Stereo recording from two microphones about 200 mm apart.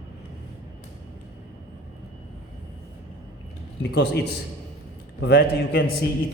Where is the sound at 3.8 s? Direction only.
55° left (ahead or behind).